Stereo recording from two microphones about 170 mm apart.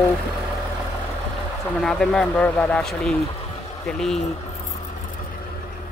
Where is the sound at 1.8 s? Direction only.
Centre (ahead or behind).